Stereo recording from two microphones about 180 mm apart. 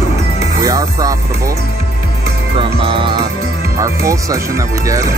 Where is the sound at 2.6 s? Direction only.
30° right (ahead or behind).